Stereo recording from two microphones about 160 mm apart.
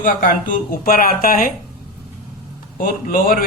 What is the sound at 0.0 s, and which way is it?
A man's voice, 60° left (ahead or behind).